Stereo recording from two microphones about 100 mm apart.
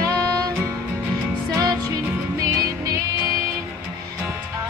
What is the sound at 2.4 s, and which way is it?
Music, 35° right (ahead or behind).